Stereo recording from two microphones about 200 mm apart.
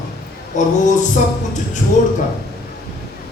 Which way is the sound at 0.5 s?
40° left (ahead or behind).